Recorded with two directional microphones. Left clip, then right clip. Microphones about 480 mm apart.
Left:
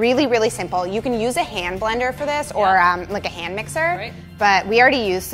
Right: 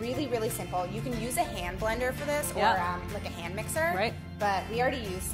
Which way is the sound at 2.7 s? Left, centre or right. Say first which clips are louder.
Left 15 dB; left.